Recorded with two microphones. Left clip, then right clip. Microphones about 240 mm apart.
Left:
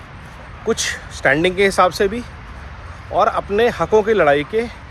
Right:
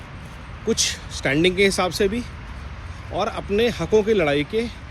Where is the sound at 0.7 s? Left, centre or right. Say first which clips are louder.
Left 1 dB; centre.